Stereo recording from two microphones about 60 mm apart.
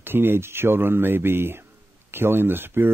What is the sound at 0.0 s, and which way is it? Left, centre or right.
Speech, right.